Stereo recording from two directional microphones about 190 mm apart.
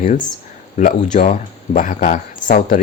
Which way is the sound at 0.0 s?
45° left (ahead or behind).